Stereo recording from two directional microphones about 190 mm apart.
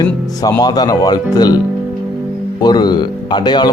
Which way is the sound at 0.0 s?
20° left (ahead or behind).